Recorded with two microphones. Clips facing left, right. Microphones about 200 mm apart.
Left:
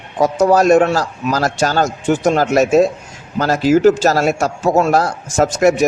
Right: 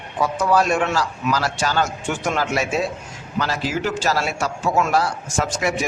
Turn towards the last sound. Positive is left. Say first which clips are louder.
# left 10 dB
turn(degrees=45)  # may be behind; listen again after turning